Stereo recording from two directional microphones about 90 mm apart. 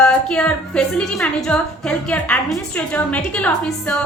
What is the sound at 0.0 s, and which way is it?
A woman's voice, 10° left (ahead or behind).